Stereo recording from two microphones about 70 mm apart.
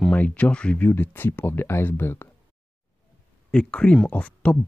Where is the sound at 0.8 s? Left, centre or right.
Left.